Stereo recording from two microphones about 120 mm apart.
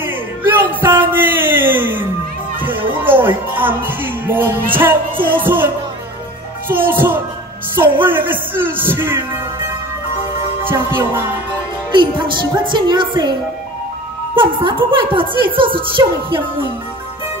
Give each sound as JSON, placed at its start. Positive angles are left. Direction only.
{"t": 0.0, "sound": "music", "side_deg": -15}
{"t": 5.3, "sound": "speech", "side_deg": -15}
{"t": 6.7, "sound": "music", "side_deg": -15}
{"t": 10.6, "sound": "music", "side_deg": -20}
{"t": 11.9, "sound": "speech", "side_deg": -40}
{"t": 14.3, "sound": "speech", "side_deg": -45}